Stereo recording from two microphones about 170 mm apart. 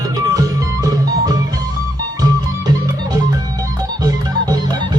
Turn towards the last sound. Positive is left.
turn(degrees=-20)  # may be behind; listen again after turning